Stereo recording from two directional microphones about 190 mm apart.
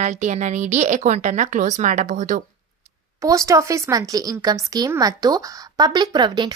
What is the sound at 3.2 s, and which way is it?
Speech, 15° right (ahead or behind).